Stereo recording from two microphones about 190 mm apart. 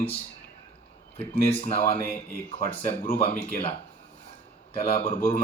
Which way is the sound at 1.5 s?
30° left (ahead or behind).